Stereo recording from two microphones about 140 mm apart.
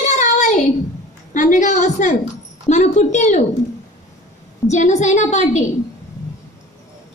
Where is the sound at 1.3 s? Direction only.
65° left (ahead or behind).